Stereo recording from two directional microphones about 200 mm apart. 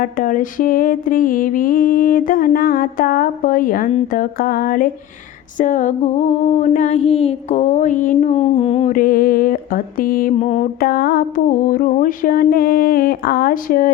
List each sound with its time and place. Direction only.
0.0 s mantra: 45° left (ahead or behind)
5.5 s a sound: 40° left (ahead or behind)
9.0 s mantra: 45° left (ahead or behind)
10.3 s mantra: 35° left (ahead or behind)